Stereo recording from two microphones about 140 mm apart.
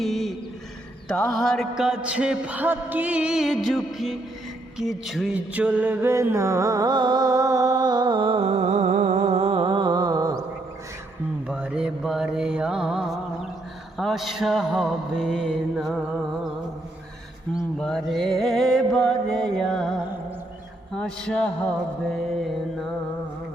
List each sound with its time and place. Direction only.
0.0 s a sound: centre (ahead or behind)
1.0 s mantra: 5° left (ahead or behind)
5.5 s music: 10° right (ahead or behind); by 10.4 s 25° right (ahead or behind)
11.4 s mantra: 10° right (ahead or behind)
17.7 s mantra: 5° left (ahead or behind)
20.9 s a sound: 5° left (ahead or behind)
22.1 s mantra: centre (ahead or behind)